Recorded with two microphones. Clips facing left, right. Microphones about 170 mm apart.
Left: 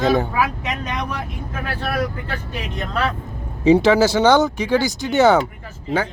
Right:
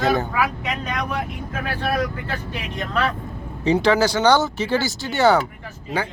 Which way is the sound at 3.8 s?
25° left (ahead or behind).